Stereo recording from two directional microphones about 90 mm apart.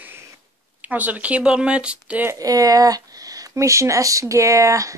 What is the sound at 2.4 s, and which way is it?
Speech, 40° right (ahead or behind).